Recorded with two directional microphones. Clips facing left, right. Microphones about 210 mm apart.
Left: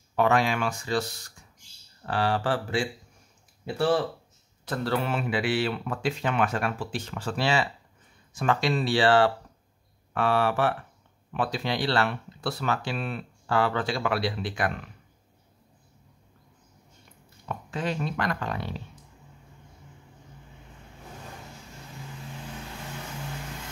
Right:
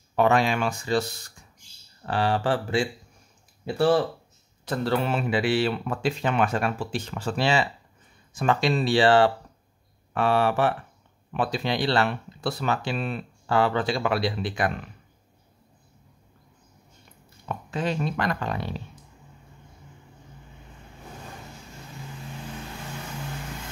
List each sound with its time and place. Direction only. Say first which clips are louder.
0.1 s speech: right 2 dB; 25° right (ahead or behind)
4.6 s speech: right 3 dB; 25° right (ahead or behind)
17.6 s speech: right 3 dB; 25° right (ahead or behind)